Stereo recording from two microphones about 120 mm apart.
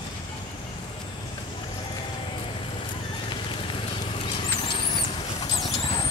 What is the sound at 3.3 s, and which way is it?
Vehicle, 45° left (ahead or behind).